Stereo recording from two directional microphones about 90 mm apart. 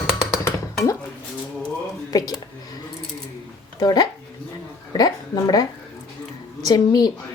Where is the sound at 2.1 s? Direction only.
45° left (ahead or behind).